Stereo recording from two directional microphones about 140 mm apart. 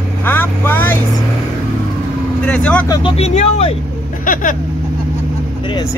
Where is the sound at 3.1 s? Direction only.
50° left (ahead or behind).